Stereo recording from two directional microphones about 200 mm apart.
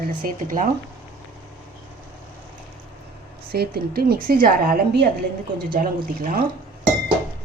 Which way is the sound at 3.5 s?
50° right (ahead or behind).